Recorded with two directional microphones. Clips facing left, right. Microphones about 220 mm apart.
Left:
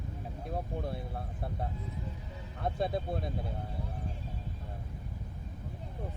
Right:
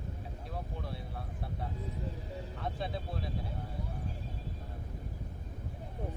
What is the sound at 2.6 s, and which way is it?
Speech, 50° left (ahead or behind).